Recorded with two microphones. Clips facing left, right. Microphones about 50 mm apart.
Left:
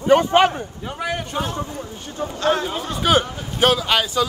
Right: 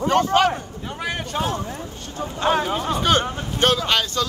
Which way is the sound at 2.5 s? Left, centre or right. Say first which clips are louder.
Right 1 dB; centre.